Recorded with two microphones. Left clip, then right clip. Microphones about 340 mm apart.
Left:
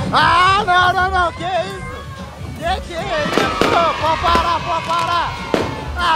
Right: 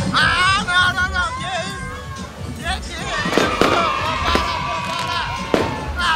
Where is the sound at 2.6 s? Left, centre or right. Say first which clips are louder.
Left 5 dB; centre.